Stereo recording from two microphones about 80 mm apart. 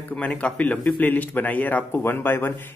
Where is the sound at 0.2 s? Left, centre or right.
Centre.